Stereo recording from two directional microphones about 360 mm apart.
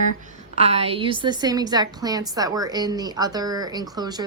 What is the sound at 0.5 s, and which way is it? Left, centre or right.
A woman's voice, centre.